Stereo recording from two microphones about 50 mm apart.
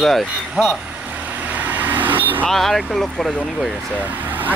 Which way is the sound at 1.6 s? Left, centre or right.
Right.